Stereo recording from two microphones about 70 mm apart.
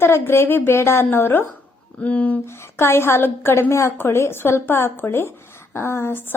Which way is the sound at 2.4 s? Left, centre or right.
Left.